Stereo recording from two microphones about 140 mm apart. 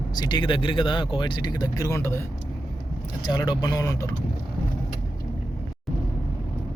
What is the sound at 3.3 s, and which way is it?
Speech, 30° left (ahead or behind).